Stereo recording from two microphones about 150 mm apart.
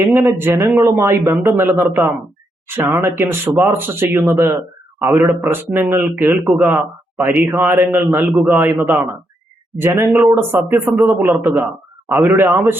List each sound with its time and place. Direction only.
0.0 s speech: 15° right (ahead or behind)